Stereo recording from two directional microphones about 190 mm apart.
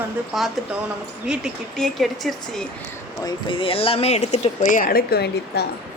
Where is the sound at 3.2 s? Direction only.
25° left (ahead or behind); by 5.7 s 60° left (ahead or behind).